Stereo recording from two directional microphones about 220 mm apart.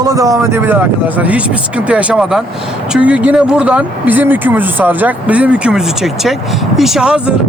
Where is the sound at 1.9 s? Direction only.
5° right (ahead or behind).